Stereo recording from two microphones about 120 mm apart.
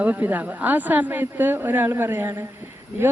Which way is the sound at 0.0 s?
15° right (ahead or behind).